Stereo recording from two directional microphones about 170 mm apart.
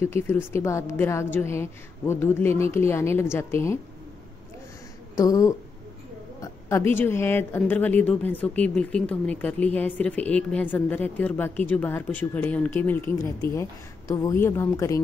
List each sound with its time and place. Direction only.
0.0 s speech: 15° left (ahead or behind)
5.1 s speech: 20° left (ahead or behind)
6.9 s speech: 15° left (ahead or behind)